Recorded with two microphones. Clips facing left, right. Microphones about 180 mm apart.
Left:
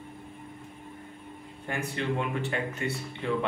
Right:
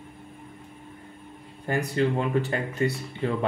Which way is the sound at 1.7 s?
35° right (ahead or behind).